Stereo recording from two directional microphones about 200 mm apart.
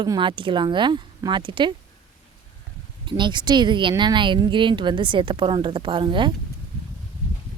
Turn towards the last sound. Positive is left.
turn(degrees=-25)  # may be behind; listen again after turning